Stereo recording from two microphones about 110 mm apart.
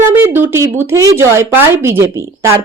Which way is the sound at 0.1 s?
20° right (ahead or behind).